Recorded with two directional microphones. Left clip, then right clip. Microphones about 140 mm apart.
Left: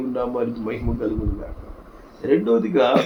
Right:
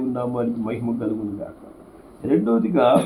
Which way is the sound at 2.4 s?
40° right (ahead or behind).